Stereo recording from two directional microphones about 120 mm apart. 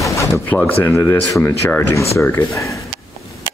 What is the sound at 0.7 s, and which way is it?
Speech, 15° left (ahead or behind).